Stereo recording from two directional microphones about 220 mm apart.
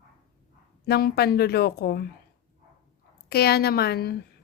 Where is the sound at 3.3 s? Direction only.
45° left (ahead or behind).